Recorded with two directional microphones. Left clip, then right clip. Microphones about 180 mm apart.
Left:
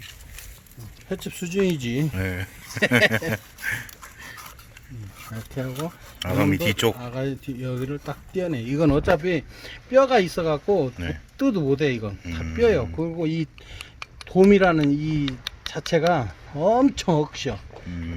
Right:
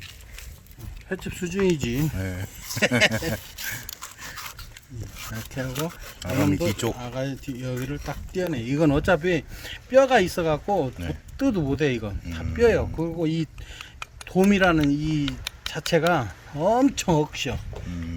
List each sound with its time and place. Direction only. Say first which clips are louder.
1.1 s speech: left 2 dB; 45° left (ahead or behind)
2.1 s speech: left 5 dB; 5° left (ahead or behind)
3.1 s speech: left 3 dB; 15° left (ahead or behind)
5.3 s speech: even; 35° left (ahead or behind)
7.0 s speech: left 1 dB; 45° left (ahead or behind)
10.9 s speech: left 2 dB; centre (ahead or behind)
11.3 s speech: left 2 dB; 30° left (ahead or behind)
12.2 s speech: left 2 dB; centre (ahead or behind)
12.5 s speech: even; 30° left (ahead or behind)